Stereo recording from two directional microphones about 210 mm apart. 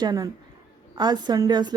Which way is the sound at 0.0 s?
20° right (ahead or behind).